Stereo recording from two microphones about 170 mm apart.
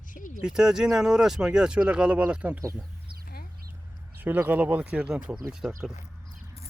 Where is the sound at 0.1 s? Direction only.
50° left (ahead or behind).